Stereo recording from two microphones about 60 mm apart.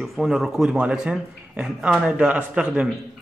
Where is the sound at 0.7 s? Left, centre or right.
Centre.